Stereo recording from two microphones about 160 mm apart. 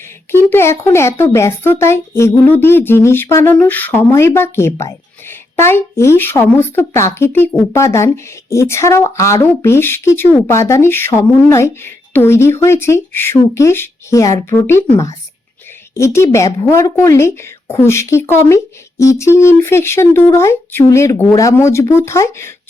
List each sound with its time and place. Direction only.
0.3 s a woman's voice: 15° left (ahead or behind)